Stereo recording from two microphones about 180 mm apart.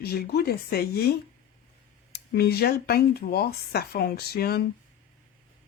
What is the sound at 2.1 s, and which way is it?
Speech, 60° left (ahead or behind).